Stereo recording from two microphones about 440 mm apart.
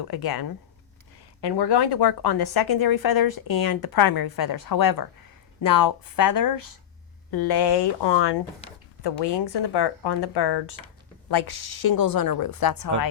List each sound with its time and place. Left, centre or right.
0.0 s a woman's voice: left